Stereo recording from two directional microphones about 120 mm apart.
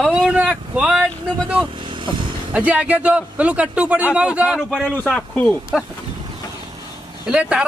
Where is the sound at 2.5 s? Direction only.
10° right (ahead or behind).